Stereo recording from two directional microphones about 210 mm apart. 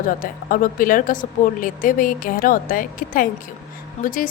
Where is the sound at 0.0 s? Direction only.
40° left (ahead or behind).